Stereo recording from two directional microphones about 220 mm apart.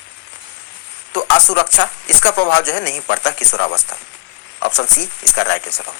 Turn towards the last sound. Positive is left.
turn(degrees=50)  # may be behind; listen again after turning